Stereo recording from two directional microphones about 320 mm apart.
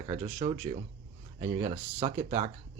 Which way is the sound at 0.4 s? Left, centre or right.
Centre.